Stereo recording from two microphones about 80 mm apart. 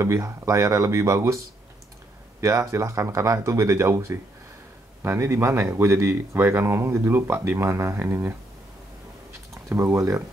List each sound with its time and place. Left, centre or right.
0.0 s speech: right
2.7 s speech: right
9.5 s speech: right